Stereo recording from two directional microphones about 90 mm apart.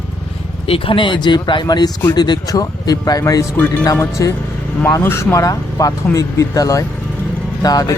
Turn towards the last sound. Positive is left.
turn(degrees=45)  # may be behind; listen again after turning